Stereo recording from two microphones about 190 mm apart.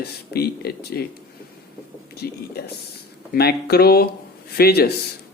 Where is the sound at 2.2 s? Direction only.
55° left (ahead or behind).